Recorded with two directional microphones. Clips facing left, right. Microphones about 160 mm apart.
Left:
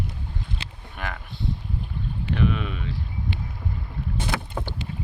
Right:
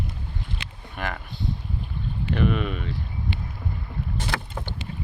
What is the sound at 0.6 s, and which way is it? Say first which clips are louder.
Boat: even; 30° left (ahead or behind).